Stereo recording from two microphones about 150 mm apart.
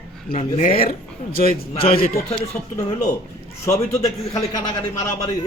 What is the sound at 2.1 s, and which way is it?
Speech, 20° left (ahead or behind).